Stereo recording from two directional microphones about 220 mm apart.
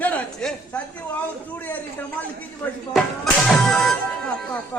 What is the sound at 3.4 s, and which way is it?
Music, centre (ahead or behind).